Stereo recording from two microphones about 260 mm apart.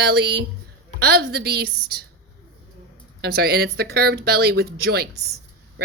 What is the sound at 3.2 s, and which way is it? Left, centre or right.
A woman's voice, right.